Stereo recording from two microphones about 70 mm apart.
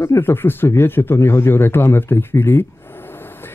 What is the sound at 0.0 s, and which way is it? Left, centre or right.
Speech, left.